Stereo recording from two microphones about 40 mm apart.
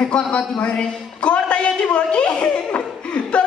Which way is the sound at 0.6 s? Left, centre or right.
Left.